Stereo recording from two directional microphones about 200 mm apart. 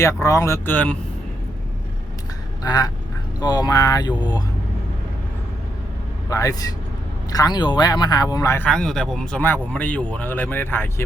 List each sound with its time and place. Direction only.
0.0 s speech: 15° left (ahead or behind)
2.6 s speech: 20° left (ahead or behind)
6.3 s speech: 15° left (ahead or behind)